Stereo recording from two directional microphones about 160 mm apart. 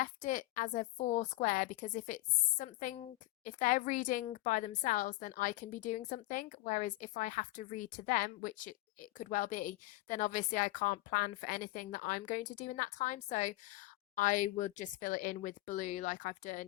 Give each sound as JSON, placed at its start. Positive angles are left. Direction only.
{"t": 0.0, "sound": "a woman's voice", "side_deg": 55}